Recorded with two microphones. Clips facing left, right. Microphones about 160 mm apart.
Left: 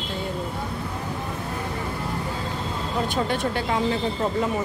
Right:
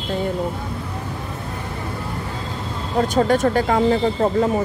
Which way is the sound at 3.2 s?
45° right (ahead or behind).